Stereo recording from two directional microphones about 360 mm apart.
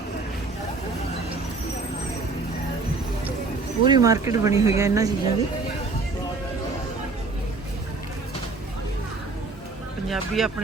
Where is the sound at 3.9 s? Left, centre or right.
Centre.